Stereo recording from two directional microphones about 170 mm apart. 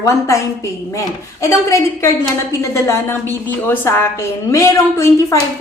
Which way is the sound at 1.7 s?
15° left (ahead or behind).